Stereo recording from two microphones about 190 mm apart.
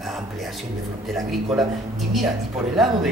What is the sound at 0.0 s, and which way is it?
Music, centre (ahead or behind).